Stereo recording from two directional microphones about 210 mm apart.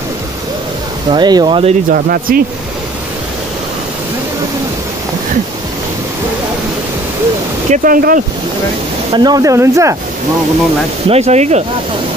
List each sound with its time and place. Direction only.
1.1 s speech: 20° right (ahead or behind)
1.9 s speech: 45° right (ahead or behind)
7.7 s speech: 40° right (ahead or behind)
9.1 s speech: 20° right (ahead or behind)
11.1 s speech: 30° right (ahead or behind)